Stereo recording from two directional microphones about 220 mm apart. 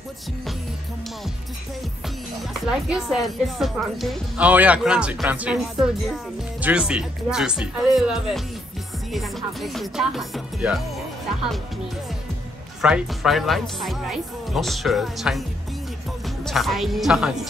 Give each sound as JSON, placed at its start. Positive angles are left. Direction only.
{"t": 2.6, "sound": "speech", "side_deg": 0}
{"t": 12.8, "sound": "speech", "side_deg": -5}
{"t": 16.4, "sound": "speech", "side_deg": 0}